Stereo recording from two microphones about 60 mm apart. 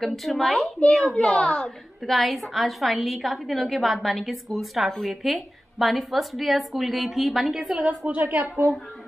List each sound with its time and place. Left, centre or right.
0.0 s a woman's voice: centre
2.1 s a woman's voice: centre
8.3 s a woman's voice: right